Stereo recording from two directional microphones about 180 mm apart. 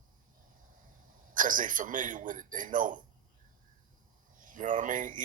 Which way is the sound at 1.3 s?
45° right (ahead or behind).